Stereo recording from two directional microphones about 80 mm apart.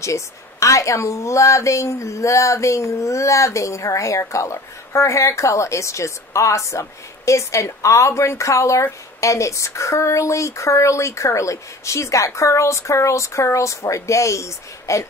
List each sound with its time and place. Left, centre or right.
0.0 s a woman's voice: left